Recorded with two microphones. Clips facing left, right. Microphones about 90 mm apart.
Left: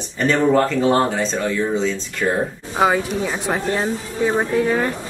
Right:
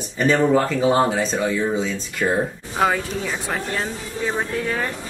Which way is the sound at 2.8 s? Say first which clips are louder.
Left 3 dB; 15° left (ahead or behind).